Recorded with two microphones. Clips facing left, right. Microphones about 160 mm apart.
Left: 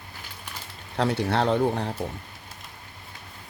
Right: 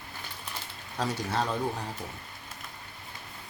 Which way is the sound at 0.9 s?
65° left (ahead or behind).